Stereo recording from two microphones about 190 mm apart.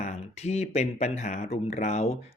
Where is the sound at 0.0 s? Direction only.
35° left (ahead or behind).